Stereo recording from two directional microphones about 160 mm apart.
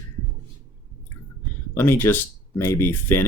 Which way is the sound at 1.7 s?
15° left (ahead or behind).